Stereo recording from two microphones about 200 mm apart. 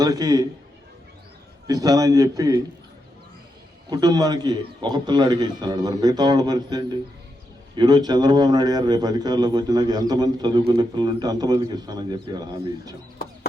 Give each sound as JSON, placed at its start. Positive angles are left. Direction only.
{"t": 0.0, "sound": "a man's voice", "side_deg": -20}
{"t": 1.6, "sound": "a man's voice", "side_deg": -20}
{"t": 3.8, "sound": "a man's voice", "side_deg": -20}